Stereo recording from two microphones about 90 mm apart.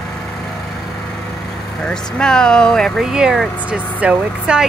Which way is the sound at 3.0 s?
5° right (ahead or behind).